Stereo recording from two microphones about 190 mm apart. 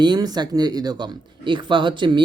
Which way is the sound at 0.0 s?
20° right (ahead or behind).